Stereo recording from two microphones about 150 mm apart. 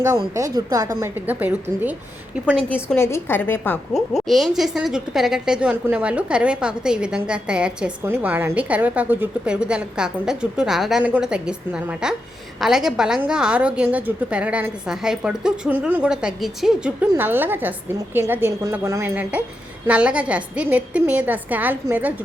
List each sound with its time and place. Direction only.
0.3 s a woman's voice: 20° right (ahead or behind)
2.6 s a woman's voice: 10° left (ahead or behind)
3.9 s a woman's voice: centre (ahead or behind)